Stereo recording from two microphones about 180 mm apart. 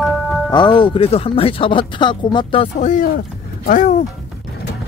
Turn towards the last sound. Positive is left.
turn(degrees=40)  # may be behind; listen again after turning